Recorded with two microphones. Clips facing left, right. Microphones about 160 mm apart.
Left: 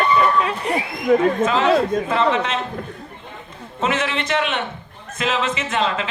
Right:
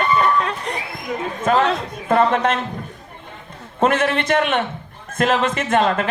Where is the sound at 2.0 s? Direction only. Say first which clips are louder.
Right 3 dB; 50° right (ahead or behind).